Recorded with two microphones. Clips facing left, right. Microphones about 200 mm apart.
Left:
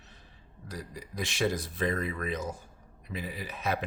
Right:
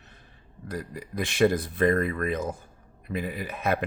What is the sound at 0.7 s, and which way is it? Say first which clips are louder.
Speech: right 7 dB; 55° right (ahead or behind).